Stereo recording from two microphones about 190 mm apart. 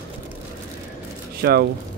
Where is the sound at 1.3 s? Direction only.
55° right (ahead or behind).